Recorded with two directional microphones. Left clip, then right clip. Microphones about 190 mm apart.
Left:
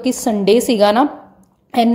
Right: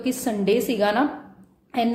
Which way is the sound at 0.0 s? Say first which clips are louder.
Left 8 dB; 35° left (ahead or behind).